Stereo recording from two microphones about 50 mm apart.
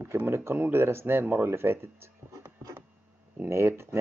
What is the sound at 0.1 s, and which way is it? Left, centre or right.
Speech, right.